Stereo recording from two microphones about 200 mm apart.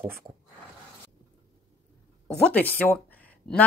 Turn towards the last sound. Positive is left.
turn(degrees=5)  # may be behind; listen again after turning